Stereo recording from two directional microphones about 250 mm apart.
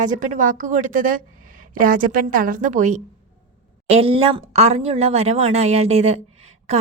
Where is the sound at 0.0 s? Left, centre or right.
Right.